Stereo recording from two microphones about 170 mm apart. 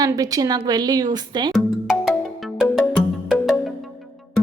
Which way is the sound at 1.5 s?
Centre (ahead or behind).